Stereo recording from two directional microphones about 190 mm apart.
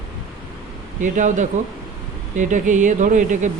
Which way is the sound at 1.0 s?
40° right (ahead or behind).